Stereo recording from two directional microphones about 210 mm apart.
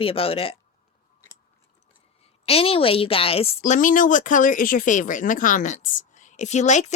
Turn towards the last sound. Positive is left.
turn(degrees=35)  # may be behind; listen again after turning